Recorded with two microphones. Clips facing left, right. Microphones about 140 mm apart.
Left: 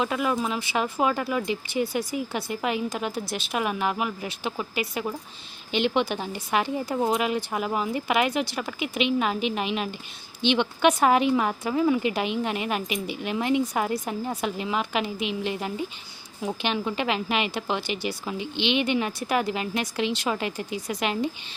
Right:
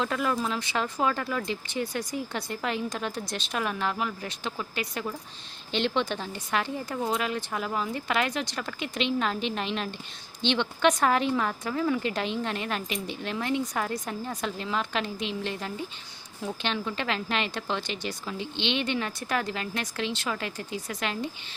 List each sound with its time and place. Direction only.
0.0 s a woman's voice: 10° left (ahead or behind)